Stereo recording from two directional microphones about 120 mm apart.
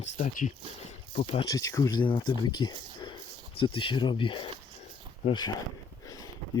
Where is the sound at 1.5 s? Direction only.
30° left (ahead or behind).